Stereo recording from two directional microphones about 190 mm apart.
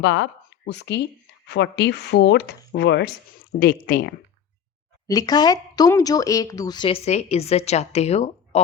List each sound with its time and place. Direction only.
0.0 s speech: 70° left (ahead or behind)
3.6 s speech: 50° left (ahead or behind)
5.0 s speech: 20° left (ahead or behind)